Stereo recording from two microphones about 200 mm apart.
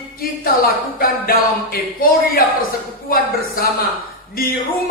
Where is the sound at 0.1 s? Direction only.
50° left (ahead or behind).